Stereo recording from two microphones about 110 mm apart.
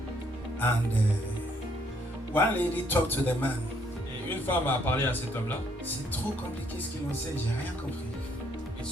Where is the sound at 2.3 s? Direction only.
15° left (ahead or behind).